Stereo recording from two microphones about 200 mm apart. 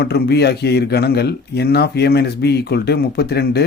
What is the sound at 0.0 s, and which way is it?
Speech, 55° left (ahead or behind).